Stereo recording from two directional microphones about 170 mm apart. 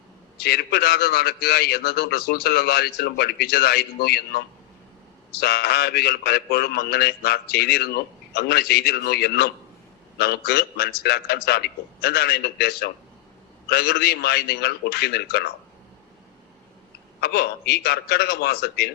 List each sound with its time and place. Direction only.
0.3 s a man's voice: 70° left (ahead or behind)
17.2 s a man's voice: 65° left (ahead or behind)